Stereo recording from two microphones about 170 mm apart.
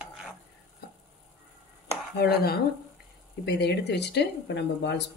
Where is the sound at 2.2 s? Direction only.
70° left (ahead or behind).